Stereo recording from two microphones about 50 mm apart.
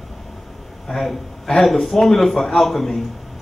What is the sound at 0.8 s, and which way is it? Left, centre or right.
A man's voice, centre.